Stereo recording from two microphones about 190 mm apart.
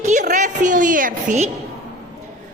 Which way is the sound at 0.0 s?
40° right (ahead or behind).